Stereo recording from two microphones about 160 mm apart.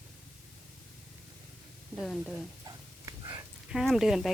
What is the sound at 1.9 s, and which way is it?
Speech, centre (ahead or behind).